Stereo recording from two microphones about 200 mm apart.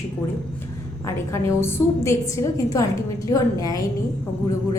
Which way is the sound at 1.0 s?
15° left (ahead or behind).